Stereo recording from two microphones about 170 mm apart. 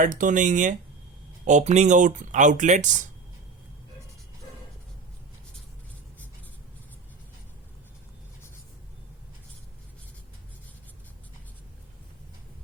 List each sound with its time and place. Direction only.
0.0 s speech: 50° right (ahead or behind)